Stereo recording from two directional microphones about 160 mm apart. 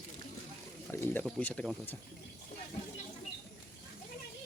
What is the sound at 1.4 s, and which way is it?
Speech, 10° left (ahead or behind).